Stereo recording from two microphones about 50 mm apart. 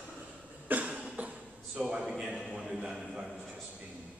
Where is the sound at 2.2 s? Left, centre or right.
Centre.